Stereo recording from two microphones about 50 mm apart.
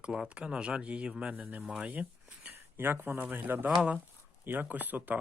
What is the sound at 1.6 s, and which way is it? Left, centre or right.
Speech, centre.